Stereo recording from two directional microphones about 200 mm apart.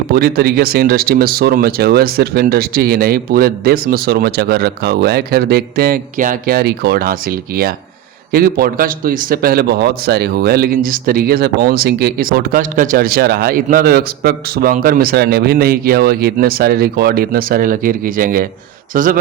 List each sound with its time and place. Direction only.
0.1 s a man's voice: 50° right (ahead or behind)